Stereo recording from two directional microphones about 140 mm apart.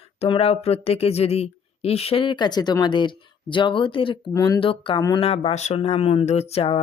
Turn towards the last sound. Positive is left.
turn(degrees=45)  # may be behind; listen again after turning